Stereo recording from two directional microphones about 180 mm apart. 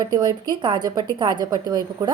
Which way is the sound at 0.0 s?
20° right (ahead or behind).